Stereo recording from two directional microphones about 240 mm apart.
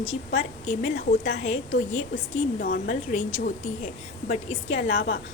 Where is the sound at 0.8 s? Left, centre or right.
Left.